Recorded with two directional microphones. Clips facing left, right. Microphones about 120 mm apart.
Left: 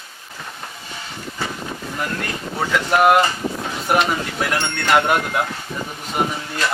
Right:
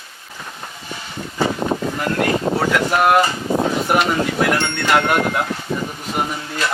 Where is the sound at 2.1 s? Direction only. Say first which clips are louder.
Right 9 dB; 85° right.